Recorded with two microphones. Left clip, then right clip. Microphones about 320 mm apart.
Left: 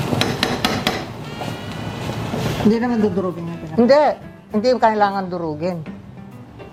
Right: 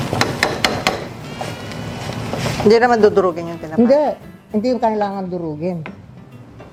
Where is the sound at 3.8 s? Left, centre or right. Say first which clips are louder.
Left 1 dB; left.